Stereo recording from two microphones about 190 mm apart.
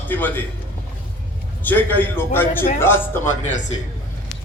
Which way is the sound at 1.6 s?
10° left (ahead or behind).